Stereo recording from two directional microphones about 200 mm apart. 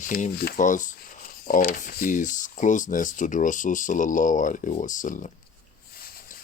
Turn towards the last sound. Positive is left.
turn(degrees=45)  # may be behind; listen again after turning